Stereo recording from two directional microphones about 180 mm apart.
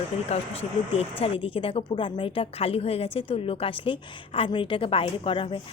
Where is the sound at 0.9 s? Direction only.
30° left (ahead or behind).